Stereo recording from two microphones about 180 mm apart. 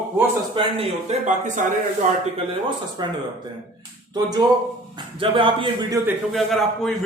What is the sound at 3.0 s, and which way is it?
Speech, 20° right (ahead or behind).